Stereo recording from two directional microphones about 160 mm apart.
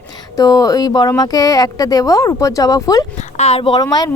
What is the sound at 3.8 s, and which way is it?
Speech, 25° left (ahead or behind).